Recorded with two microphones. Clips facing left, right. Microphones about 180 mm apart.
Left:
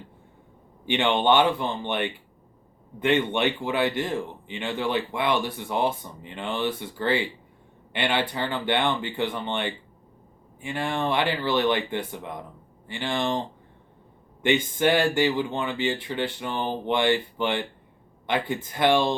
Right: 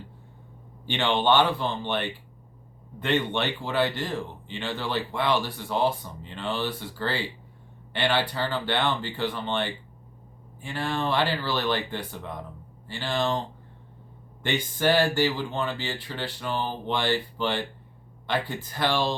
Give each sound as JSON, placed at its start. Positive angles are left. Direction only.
{"t": 0.9, "sound": "speech", "side_deg": 20}
{"t": 3.3, "sound": "speech", "side_deg": 15}
{"t": 14.4, "sound": "speech", "side_deg": 20}